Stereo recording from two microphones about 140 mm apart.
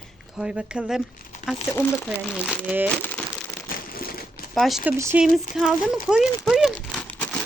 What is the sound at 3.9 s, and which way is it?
Crumpling, 90° left.